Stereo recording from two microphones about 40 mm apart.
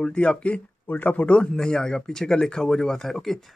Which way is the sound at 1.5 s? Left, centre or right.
Centre.